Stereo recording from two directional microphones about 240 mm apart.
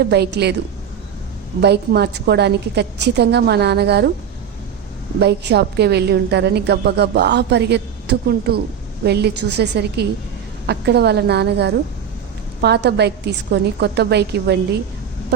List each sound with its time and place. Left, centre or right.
0.0 s a woman's voice: right
1.6 s a woman's voice: right
5.2 s a woman's voice: right